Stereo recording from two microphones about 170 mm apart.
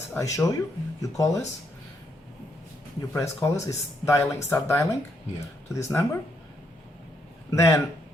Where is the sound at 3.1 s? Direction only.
20° left (ahead or behind).